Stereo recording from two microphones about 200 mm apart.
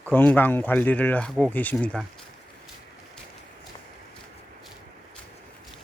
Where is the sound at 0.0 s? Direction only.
10° left (ahead or behind).